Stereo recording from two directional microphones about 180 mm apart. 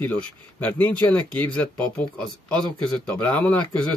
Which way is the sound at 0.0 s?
10° left (ahead or behind).